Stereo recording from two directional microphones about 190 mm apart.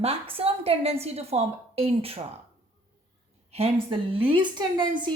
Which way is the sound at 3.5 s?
30° right (ahead or behind).